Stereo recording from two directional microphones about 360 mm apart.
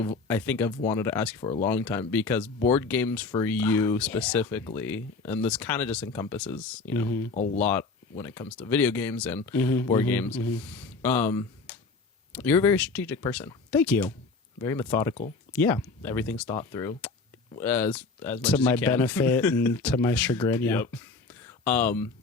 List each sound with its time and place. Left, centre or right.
0.0 s speech: centre
7.3 s speech: centre
7.6 s speech: centre